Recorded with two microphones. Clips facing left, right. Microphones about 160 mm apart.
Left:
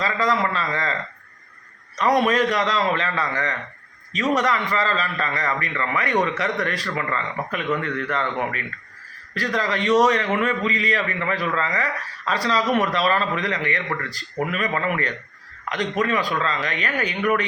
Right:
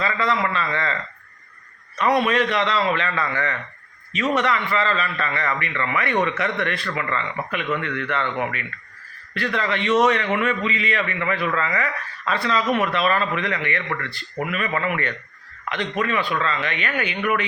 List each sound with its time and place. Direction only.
0.0 s a man's voice: 40° left (ahead or behind)
2.0 s a man's voice: 40° left (ahead or behind)
9.3 s a man's voice: 40° left (ahead or behind)